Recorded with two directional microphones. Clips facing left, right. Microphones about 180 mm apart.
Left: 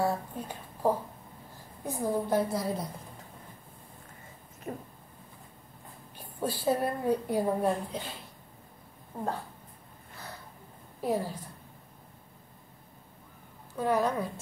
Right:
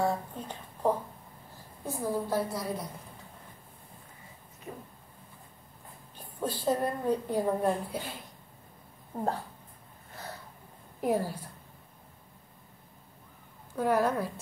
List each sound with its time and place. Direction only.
0.0 s a woman's voice: 10° left (ahead or behind)
4.7 s a sound: 55° left (ahead or behind)
6.1 s a woman's voice: 10° left (ahead or behind)
7.6 s a woman's voice: 10° right (ahead or behind)
11.0 s a woman's voice: 15° right (ahead or behind)
13.7 s a woman's voice: 10° right (ahead or behind)